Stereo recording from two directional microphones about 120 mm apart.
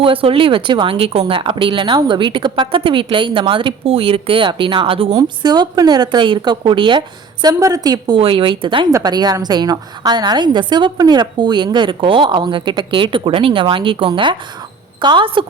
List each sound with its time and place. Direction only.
0.0 s speech: 50° right (ahead or behind)
5.1 s a woman's voice: 35° right (ahead or behind)
7.4 s a woman's voice: 30° right (ahead or behind)
8.2 s speech: 45° right (ahead or behind)
8.9 s a woman's voice: 25° right (ahead or behind); by 15.4 s 40° right (ahead or behind)